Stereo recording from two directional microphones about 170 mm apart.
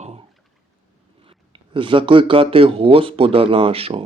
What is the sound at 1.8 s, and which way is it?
Speech, 30° right (ahead or behind).